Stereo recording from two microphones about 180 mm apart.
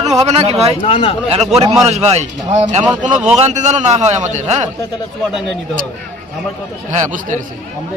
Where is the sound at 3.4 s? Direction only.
40° right (ahead or behind).